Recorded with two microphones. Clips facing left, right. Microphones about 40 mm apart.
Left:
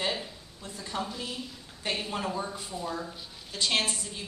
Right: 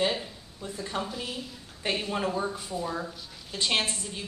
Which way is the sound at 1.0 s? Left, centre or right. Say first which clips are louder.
Right 1 dB; centre.